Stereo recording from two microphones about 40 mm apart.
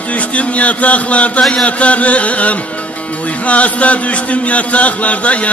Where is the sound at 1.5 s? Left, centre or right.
Left.